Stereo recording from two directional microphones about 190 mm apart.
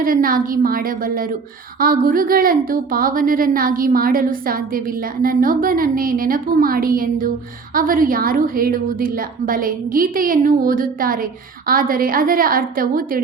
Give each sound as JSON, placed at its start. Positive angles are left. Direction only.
{"t": 0.0, "sound": "a woman's voice", "side_deg": -50}